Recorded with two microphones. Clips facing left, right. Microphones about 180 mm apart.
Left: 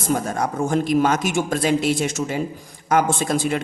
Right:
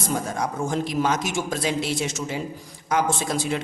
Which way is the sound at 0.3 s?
50° left (ahead or behind).